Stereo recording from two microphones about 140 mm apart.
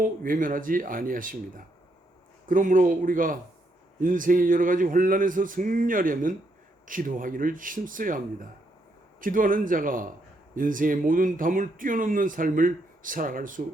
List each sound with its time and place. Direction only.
0.0 s speech: 75° right (ahead or behind)